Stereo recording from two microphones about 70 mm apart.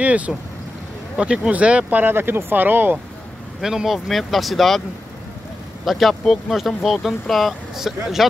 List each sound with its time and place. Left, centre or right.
0.0 s speech: right
3.6 s speech: centre
5.9 s speech: centre